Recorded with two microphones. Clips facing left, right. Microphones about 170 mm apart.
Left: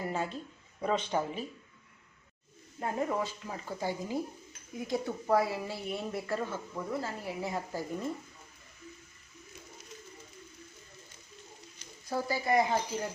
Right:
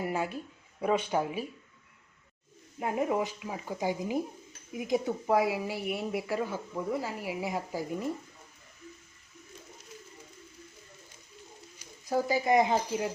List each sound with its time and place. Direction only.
0.0 s speech: 10° right (ahead or behind)
2.7 s speech: 15° right (ahead or behind)
11.8 s speech: 15° right (ahead or behind)